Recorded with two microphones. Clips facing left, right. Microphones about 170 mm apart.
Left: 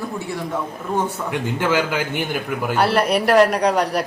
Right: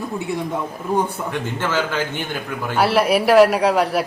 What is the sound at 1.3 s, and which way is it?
A man's voice, 15° left (ahead or behind).